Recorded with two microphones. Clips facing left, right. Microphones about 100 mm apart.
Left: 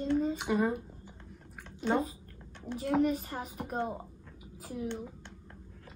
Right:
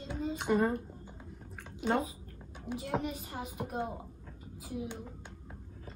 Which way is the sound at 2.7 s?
40° left (ahead or behind).